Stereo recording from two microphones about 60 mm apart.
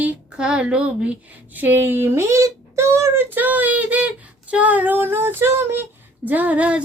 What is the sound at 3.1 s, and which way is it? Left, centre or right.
A woman's voice, right.